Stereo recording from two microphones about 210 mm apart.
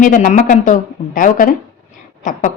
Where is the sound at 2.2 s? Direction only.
35° left (ahead or behind).